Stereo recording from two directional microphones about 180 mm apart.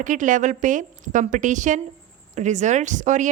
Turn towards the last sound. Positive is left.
turn(degrees=-45)  # may be behind; listen again after turning